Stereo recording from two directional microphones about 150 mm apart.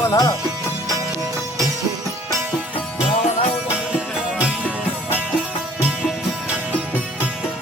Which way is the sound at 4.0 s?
10° right (ahead or behind).